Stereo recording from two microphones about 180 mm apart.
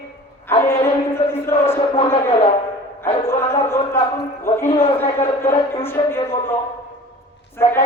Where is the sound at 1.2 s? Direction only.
35° left (ahead or behind).